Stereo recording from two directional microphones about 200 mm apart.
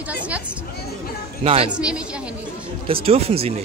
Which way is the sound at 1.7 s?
5° right (ahead or behind).